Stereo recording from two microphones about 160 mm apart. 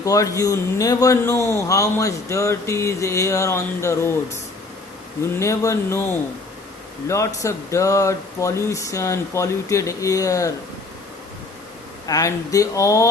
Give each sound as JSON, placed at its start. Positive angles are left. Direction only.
{"t": 0.0, "sound": "speech", "side_deg": 20}
{"t": 5.4, "sound": "speech", "side_deg": 20}
{"t": 12.0, "sound": "speech", "side_deg": 20}